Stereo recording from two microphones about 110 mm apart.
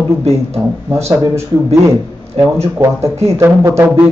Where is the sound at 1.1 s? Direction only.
25° right (ahead or behind).